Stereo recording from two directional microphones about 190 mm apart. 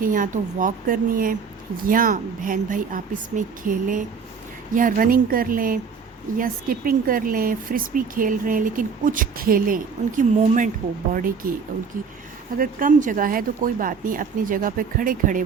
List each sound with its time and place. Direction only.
0.0 s speech: 45° right (ahead or behind)
12.5 s speech: 45° right (ahead or behind)